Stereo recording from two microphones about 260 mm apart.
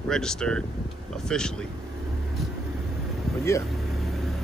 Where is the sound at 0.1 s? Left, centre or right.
Centre.